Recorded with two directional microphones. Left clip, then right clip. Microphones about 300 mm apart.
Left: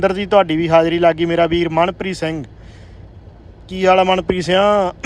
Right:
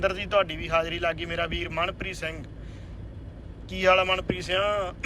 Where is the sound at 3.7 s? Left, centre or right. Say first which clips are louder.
Left 9 dB; centre.